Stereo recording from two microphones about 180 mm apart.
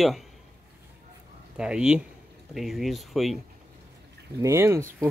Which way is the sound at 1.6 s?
5° right (ahead or behind).